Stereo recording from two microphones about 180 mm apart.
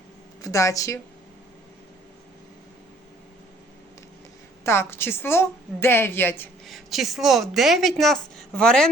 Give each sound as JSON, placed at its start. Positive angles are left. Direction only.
{"t": 0.4, "sound": "a woman's voice", "side_deg": 20}
{"t": 4.6, "sound": "a woman's voice", "side_deg": 15}
{"t": 6.7, "sound": "a woman's voice", "side_deg": 0}